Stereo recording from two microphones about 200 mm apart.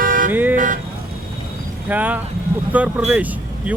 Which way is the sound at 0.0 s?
45° right (ahead or behind).